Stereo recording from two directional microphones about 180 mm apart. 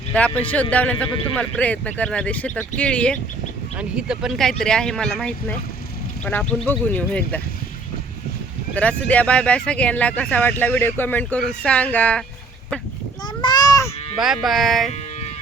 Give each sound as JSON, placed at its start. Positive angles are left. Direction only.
{"t": 0.1, "sound": "speech", "side_deg": 5}
{"t": 3.8, "sound": "speech", "side_deg": -5}
{"t": 8.7, "sound": "speech", "side_deg": 5}
{"t": 13.4, "sound": "a sound", "side_deg": 25}
{"t": 14.2, "sound": "speech", "side_deg": 0}